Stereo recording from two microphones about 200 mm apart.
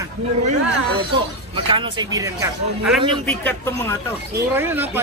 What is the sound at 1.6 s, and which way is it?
Speech, 25° right (ahead or behind).